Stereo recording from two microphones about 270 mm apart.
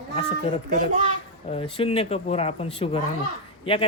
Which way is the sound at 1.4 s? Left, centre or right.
Left.